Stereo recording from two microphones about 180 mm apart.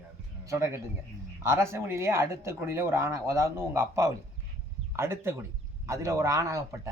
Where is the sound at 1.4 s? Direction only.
15° right (ahead or behind).